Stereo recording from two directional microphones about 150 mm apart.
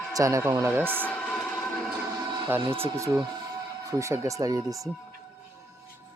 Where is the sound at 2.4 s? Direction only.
15° right (ahead or behind).